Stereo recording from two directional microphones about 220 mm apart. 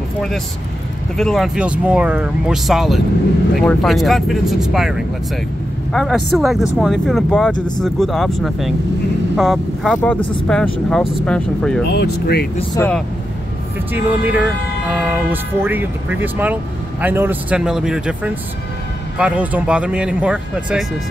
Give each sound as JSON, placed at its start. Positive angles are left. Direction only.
{"t": 1.1, "sound": "speech", "side_deg": 0}
{"t": 7.5, "sound": "speech", "side_deg": 20}
{"t": 7.8, "sound": "speech", "side_deg": 0}
{"t": 11.9, "sound": "speech", "side_deg": 50}
{"t": 12.7, "sound": "speech", "side_deg": 10}
{"t": 13.9, "sound": "speech", "side_deg": -10}